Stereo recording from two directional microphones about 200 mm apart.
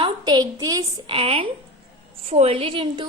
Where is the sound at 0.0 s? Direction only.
20° right (ahead or behind).